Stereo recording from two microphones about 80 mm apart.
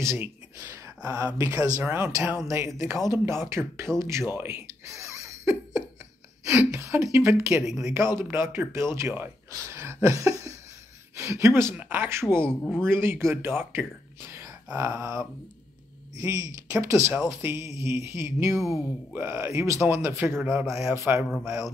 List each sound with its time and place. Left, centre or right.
0.0 s speech: right
1.8 s speech: right
6.4 s speech: centre
6.7 s speech: right
11.7 s speech: centre
12.0 s speech: right